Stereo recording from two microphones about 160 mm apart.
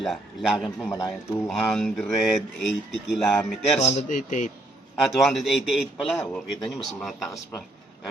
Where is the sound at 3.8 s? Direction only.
45° left (ahead or behind).